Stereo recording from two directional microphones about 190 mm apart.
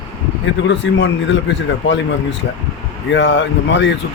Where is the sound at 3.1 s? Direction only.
70° left (ahead or behind).